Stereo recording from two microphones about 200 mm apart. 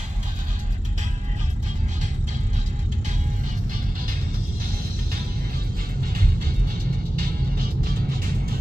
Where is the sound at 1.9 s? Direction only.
35° right (ahead or behind).